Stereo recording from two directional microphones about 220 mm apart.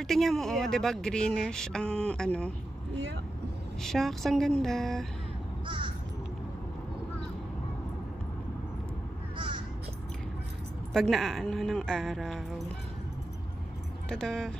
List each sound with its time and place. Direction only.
0.0 s speech: centre (ahead or behind)
3.8 s speech: centre (ahead or behind)
5.7 s crow: 20° right (ahead or behind)
10.9 s speech: centre (ahead or behind)
14.0 s speech: centre (ahead or behind)